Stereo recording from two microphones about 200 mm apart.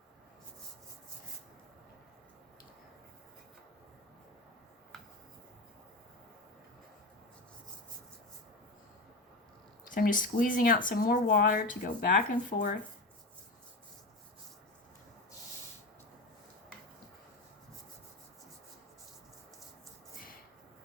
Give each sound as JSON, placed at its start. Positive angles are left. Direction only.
{"t": 9.9, "sound": "speech", "side_deg": 45}